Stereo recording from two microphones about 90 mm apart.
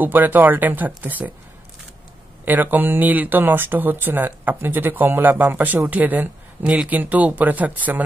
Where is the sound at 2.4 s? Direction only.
20° right (ahead or behind).